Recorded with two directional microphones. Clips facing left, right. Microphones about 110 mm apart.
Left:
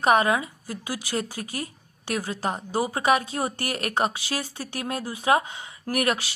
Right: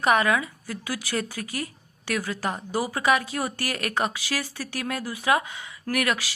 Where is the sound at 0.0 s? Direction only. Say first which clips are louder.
Left 1 dB; 30° left (ahead or behind).